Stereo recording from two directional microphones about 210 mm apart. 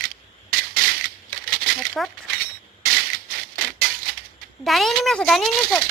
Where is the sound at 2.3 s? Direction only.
45° right (ahead or behind).